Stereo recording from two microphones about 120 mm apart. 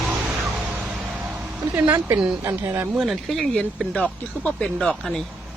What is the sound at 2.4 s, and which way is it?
Speech, 20° right (ahead or behind).